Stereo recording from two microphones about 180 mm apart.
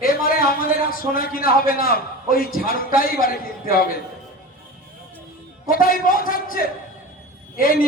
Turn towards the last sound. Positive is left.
turn(degrees=55)  # may be behind; listen again after turning